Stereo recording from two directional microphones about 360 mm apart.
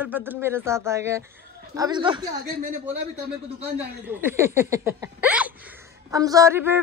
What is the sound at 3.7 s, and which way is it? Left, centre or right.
Speech, centre.